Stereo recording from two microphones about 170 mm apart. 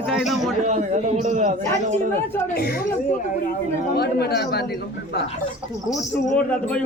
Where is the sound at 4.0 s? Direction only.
70° left (ahead or behind).